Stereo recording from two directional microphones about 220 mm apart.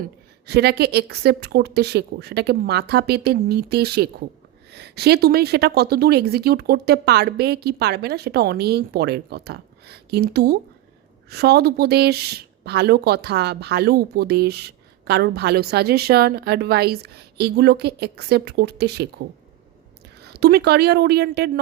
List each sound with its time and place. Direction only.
0.0 s speech: 50° right (ahead or behind)
20.2 s speech: 50° right (ahead or behind)